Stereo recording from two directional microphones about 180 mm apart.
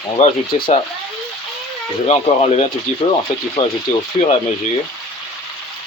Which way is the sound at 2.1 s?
35° left (ahead or behind).